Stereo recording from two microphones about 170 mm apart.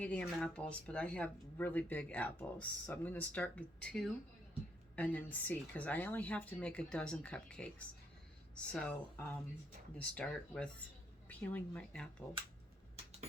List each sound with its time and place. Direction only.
0.0 s speech: 10° left (ahead or behind)